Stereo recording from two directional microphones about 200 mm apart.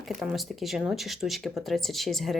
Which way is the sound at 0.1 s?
Centre (ahead or behind).